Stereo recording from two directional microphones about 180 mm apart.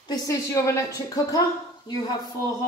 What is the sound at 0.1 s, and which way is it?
A woman's voice, 20° left (ahead or behind).